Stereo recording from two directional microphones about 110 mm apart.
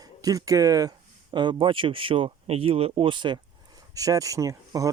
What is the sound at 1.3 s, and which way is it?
Speech, 45° right (ahead or behind).